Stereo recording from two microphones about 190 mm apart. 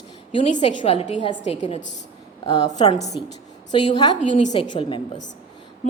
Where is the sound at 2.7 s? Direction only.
20° left (ahead or behind).